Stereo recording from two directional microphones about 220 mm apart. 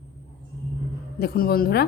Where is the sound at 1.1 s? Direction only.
45° left (ahead or behind).